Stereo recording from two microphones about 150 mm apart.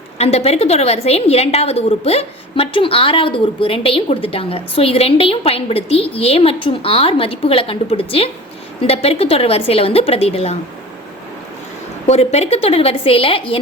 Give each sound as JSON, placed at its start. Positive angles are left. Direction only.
{"t": 0.2, "sound": "a woman's voice", "side_deg": 45}
{"t": 12.0, "sound": "a woman's voice", "side_deg": 45}